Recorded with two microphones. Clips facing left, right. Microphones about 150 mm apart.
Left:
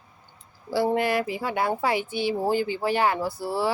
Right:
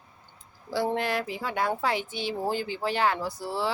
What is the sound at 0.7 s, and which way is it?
Speech, 10° left (ahead or behind).